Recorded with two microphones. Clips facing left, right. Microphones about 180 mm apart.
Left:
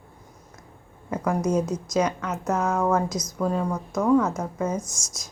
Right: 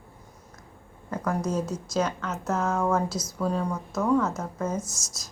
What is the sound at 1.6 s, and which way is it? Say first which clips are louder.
A woman's voice: left 3 dB; 5° right (ahead or behind).